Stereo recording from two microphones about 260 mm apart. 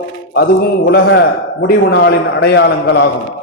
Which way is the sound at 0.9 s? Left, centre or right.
Left.